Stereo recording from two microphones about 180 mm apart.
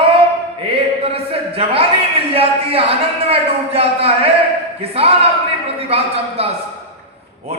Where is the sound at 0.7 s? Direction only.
30° right (ahead or behind).